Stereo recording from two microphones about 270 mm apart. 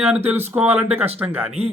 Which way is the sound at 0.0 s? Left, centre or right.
Centre.